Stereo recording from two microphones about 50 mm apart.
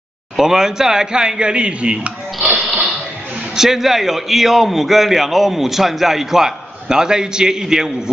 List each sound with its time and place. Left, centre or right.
0.4 s speech: centre; by 2.6 s right
3.5 s a man's voice: centre